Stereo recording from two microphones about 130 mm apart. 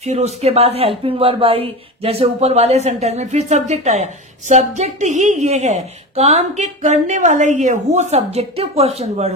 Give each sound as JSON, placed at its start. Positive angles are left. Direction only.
{"t": 0.0, "sound": "speech", "side_deg": -60}